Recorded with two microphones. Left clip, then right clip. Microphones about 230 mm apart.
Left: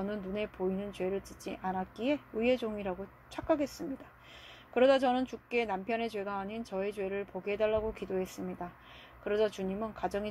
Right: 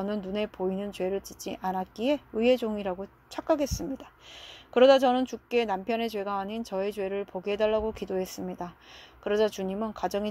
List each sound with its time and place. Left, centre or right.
0.0 s a woman's voice: right